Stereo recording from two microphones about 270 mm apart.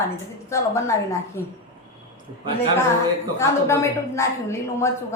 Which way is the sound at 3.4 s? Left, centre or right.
Centre.